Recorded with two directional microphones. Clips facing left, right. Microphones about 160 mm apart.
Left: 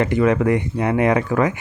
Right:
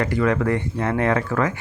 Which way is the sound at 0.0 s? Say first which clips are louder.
Left 4 dB; 20° left (ahead or behind).